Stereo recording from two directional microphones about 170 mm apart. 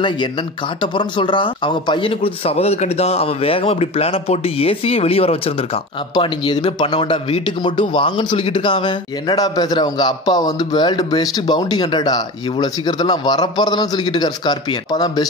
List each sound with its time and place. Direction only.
0.7 s a man's voice: 30° left (ahead or behind)